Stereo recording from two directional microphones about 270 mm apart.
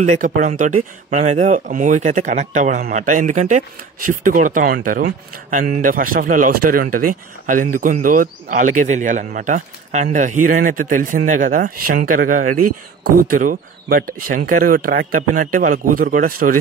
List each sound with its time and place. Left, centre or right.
0.0 s speech: right